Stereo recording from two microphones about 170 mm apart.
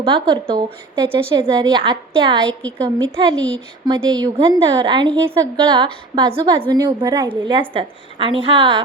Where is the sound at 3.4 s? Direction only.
5° left (ahead or behind).